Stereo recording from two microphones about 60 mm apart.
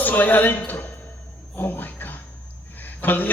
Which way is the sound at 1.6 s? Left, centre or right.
Left.